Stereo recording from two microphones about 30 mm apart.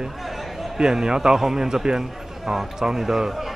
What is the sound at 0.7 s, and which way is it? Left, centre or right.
A man's voice, right.